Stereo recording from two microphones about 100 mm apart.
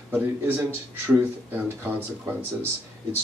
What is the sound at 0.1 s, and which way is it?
Speech, 20° right (ahead or behind).